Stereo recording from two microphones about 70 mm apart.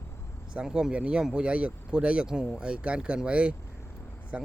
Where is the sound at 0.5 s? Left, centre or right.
Centre.